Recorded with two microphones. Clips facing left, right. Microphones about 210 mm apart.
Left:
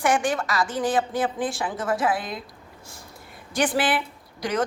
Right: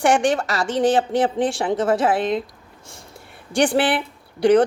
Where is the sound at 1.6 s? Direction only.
30° right (ahead or behind).